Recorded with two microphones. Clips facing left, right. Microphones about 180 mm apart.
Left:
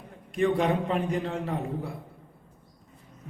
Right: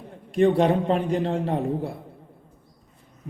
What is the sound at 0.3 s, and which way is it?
A man's voice, 30° right (ahead or behind).